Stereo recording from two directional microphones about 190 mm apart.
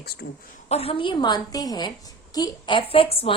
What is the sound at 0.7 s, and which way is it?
A woman's voice, 30° left (ahead or behind).